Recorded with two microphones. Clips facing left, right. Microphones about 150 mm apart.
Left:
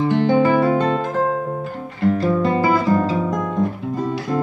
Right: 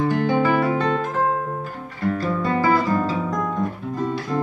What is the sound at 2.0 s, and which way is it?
Guitar, 25° left (ahead or behind).